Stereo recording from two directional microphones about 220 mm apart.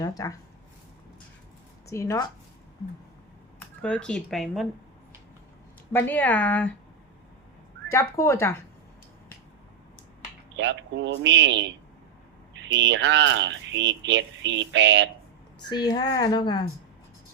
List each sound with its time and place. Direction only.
0.0 s speech: 15° left (ahead or behind)
1.9 s speech: 15° left (ahead or behind)
3.8 s speech: 5° left (ahead or behind)
5.9 s speech: 10° left (ahead or behind)
7.9 s speech: 15° left (ahead or behind)
10.6 s speech: 55° right (ahead or behind)
15.7 s speech: 20° left (ahead or behind)